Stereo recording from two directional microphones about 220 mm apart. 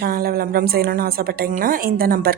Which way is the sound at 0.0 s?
45° right (ahead or behind).